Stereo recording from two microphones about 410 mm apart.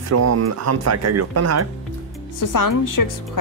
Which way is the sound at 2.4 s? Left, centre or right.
Left.